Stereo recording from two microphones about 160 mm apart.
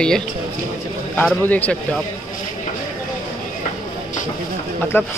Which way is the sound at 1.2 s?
10° left (ahead or behind).